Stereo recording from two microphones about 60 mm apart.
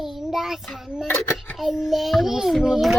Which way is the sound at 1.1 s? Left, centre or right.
Left.